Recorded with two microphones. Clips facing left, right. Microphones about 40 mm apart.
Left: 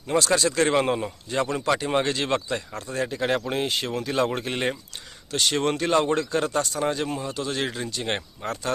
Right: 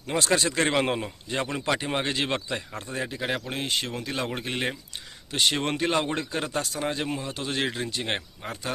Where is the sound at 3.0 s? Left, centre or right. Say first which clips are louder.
Left 7 dB; centre.